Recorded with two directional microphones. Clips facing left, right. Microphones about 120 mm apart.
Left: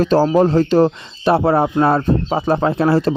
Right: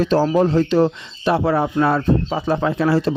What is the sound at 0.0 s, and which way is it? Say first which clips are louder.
Speech: left 3 dB; 40° left (ahead or behind).